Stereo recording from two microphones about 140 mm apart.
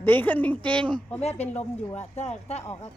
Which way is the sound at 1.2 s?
50° left (ahead or behind).